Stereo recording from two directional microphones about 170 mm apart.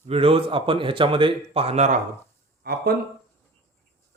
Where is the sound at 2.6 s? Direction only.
65° right (ahead or behind).